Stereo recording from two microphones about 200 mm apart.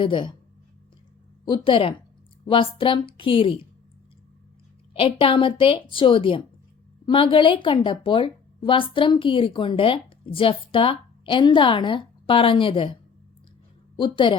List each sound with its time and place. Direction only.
0.0 s a woman's voice: 25° left (ahead or behind)
1.5 s a woman's voice: 25° left (ahead or behind)
4.9 s a woman's voice: 25° left (ahead or behind)